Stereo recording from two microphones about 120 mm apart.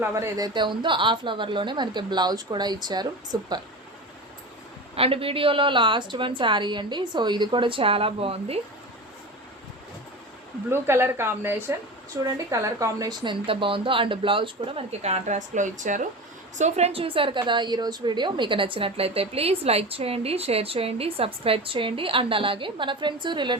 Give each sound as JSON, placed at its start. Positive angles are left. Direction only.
{"t": 0.0, "sound": "a woman's voice", "side_deg": -25}
{"t": 4.9, "sound": "a woman's voice", "side_deg": -50}
{"t": 10.7, "sound": "a woman's voice", "side_deg": -20}
{"t": 13.5, "sound": "a woman's voice", "side_deg": -45}
{"t": 16.6, "sound": "a woman's voice", "side_deg": -70}